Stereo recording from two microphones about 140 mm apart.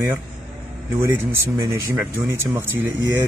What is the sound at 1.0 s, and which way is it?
Speech, 15° right (ahead or behind).